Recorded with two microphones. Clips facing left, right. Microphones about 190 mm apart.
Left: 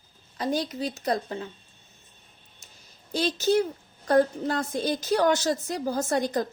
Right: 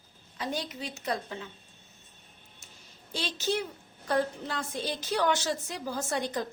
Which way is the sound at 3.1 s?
40° left (ahead or behind).